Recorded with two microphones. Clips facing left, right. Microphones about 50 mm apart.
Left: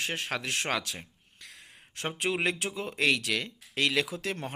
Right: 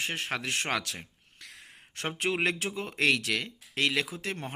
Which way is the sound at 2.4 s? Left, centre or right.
Right.